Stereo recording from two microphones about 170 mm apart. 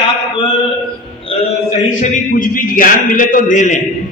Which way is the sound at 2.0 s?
50° left (ahead or behind).